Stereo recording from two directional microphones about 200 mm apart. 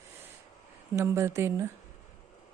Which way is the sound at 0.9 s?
15° right (ahead or behind).